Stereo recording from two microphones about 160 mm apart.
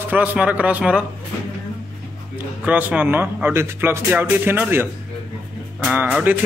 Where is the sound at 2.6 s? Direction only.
10° right (ahead or behind).